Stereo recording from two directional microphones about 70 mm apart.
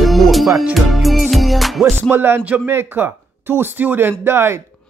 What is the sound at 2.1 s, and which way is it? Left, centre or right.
A man's voice, right.